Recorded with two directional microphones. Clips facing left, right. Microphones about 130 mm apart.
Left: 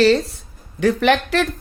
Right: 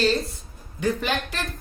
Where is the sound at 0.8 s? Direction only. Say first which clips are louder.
Left 9 dB; 80° left.